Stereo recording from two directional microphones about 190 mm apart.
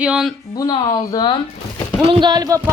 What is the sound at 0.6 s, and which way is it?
Speech, 20° left (ahead or behind).